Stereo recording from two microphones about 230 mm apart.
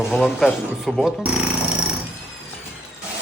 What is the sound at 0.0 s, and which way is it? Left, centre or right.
Speech, centre.